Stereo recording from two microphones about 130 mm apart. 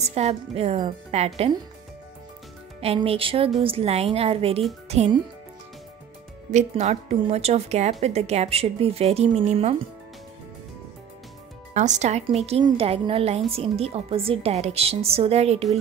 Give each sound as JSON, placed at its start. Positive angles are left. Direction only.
{"t": 0.0, "sound": "a woman's voice", "side_deg": -55}
{"t": 2.8, "sound": "a woman's voice", "side_deg": -50}
{"t": 6.5, "sound": "a woman's voice", "side_deg": -60}
{"t": 11.7, "sound": "a woman's voice", "side_deg": -65}